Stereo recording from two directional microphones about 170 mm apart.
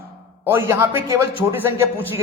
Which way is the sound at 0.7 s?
15° right (ahead or behind).